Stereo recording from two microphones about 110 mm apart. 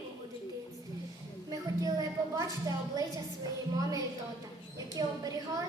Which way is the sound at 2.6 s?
35° right (ahead or behind).